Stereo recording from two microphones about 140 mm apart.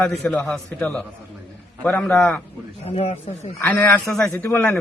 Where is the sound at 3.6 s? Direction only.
15° left (ahead or behind).